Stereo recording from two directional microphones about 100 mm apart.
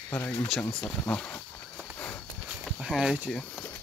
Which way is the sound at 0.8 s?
10° left (ahead or behind).